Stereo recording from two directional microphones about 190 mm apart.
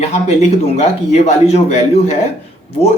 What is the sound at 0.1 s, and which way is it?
A man's voice, 35° left (ahead or behind).